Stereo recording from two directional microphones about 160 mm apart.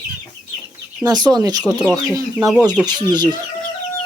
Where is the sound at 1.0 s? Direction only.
25° right (ahead or behind).